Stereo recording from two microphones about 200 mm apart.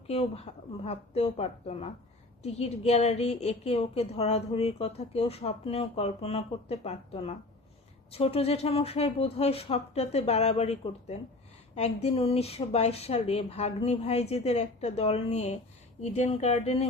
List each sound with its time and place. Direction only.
0.1 s a woman's voice: 30° left (ahead or behind)